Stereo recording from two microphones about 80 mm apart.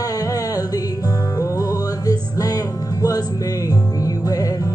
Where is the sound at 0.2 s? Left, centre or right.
Left.